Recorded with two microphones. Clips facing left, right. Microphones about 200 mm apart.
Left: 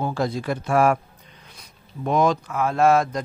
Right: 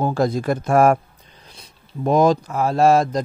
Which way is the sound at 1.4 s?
30° right (ahead or behind).